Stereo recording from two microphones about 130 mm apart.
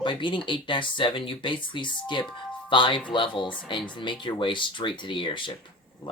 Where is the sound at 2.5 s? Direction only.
40° left (ahead or behind).